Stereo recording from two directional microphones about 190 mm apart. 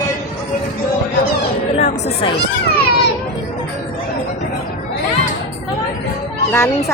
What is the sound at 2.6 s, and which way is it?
Speech, 55° left (ahead or behind).